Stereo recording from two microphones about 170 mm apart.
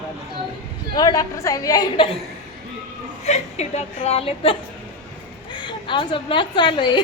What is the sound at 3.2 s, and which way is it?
A woman's voice, 40° left (ahead or behind).